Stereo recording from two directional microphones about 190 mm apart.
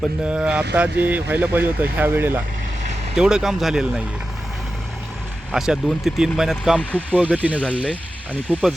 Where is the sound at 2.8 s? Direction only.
35° right (ahead or behind).